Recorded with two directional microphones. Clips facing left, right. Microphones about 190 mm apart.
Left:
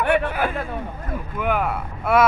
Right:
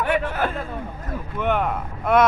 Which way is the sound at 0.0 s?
65° left (ahead or behind).